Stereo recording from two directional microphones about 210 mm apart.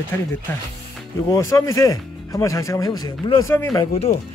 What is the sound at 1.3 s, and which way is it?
Speech, 15° left (ahead or behind).